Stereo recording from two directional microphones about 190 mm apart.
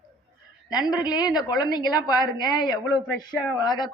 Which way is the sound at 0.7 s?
20° left (ahead or behind).